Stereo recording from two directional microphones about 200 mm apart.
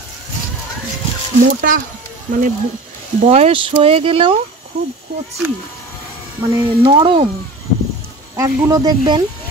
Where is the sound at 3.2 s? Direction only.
30° right (ahead or behind).